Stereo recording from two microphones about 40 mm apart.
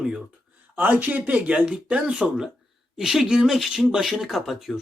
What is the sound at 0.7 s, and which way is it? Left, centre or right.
Speech, right.